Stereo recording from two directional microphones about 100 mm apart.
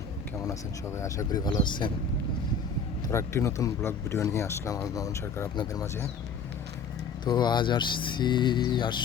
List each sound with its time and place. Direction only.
0.9 s speech: 30° left (ahead or behind); by 1.9 s 50° left (ahead or behind)
3.1 s speech: 30° left (ahead or behind)
7.3 s speech: 45° left (ahead or behind)